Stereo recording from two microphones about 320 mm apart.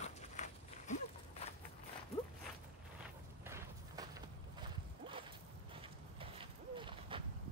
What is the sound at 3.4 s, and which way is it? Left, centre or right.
Walk, centre.